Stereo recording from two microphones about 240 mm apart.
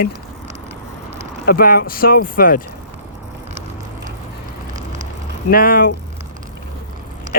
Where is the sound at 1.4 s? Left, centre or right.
Left.